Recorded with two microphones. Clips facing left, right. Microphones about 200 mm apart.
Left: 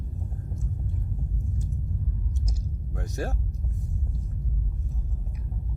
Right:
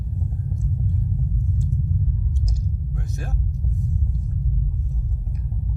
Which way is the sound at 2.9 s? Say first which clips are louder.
Left 1 dB; 40° left (ahead or behind).